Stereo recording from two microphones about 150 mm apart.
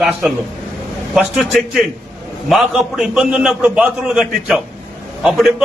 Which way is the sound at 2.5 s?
5° right (ahead or behind).